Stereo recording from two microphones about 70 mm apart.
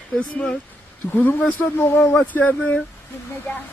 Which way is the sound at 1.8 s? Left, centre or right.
Left.